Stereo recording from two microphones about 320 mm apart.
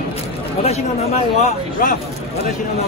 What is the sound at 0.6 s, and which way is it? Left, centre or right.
Speech, centre.